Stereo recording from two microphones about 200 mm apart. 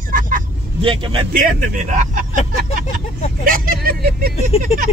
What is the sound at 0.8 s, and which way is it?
Speech, 25° right (ahead or behind).